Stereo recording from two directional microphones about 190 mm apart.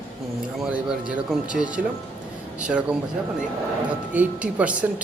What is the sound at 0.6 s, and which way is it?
A woman's voice, 5° right (ahead or behind).